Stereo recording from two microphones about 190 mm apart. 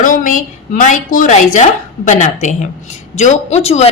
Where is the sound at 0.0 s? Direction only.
45° left (ahead or behind).